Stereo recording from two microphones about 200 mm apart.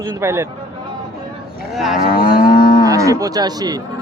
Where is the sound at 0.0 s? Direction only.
15° right (ahead or behind).